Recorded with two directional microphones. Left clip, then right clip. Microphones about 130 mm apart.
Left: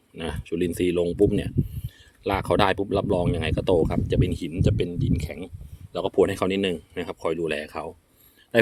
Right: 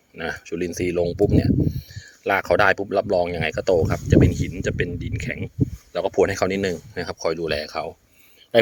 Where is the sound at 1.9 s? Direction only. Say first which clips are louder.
Right 4 dB; 25° left (ahead or behind).